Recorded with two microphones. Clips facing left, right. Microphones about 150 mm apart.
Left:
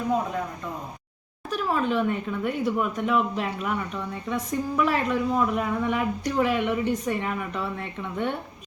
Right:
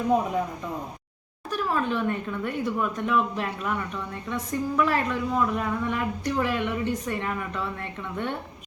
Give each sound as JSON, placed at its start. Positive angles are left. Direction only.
{"t": 1.5, "sound": "a woman's voice", "side_deg": 15}